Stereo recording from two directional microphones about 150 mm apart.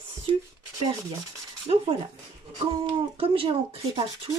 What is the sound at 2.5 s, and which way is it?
Speech, 35° right (ahead or behind).